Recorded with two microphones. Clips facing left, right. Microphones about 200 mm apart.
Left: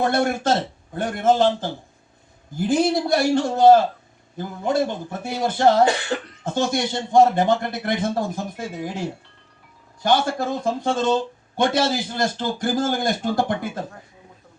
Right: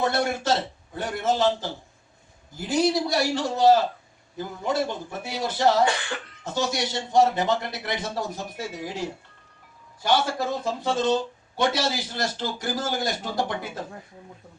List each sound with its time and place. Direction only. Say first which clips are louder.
0.0 s speech: left 4 dB; 50° left (ahead or behind)